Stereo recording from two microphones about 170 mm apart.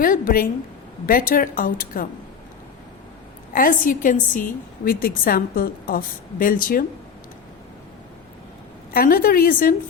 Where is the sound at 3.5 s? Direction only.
55° left (ahead or behind).